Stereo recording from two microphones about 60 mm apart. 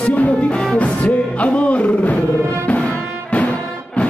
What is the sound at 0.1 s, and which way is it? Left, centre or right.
Music, left.